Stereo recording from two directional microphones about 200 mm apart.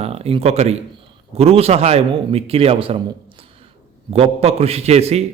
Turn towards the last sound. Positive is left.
turn(degrees=-30)  # may be behind; listen again after turning